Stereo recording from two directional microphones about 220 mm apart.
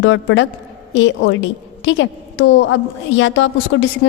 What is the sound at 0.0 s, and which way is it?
A woman's voice, 60° left (ahead or behind).